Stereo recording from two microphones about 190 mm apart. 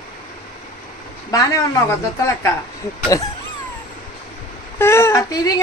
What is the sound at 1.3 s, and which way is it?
Speech, 15° left (ahead or behind).